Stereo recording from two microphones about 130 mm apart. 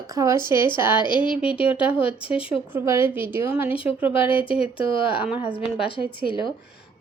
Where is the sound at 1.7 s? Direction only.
45° left (ahead or behind).